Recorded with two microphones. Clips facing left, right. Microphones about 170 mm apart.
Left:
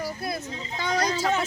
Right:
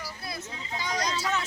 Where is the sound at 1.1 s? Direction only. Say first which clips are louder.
Left 5 dB; 30° left (ahead or behind).